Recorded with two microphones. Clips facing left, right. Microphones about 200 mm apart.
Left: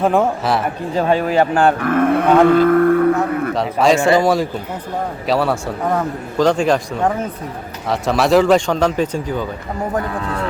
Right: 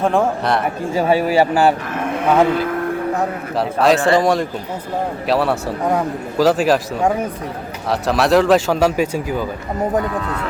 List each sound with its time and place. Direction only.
0.0 s speech: centre (ahead or behind)
1.8 s livestock: 55° left (ahead or behind)
3.5 s speech: centre (ahead or behind)